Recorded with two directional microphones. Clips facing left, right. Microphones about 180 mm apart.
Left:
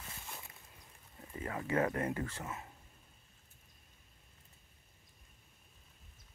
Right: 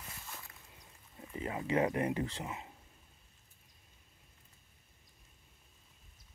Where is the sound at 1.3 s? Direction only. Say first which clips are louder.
Right 2 dB; 20° right (ahead or behind).